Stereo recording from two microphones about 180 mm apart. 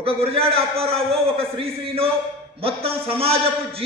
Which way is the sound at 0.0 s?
30° right (ahead or behind).